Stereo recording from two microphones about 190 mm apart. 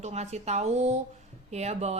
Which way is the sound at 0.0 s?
35° right (ahead or behind).